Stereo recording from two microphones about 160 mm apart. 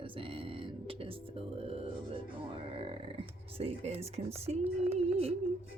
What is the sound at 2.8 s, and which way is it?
Speech, 35° right (ahead or behind).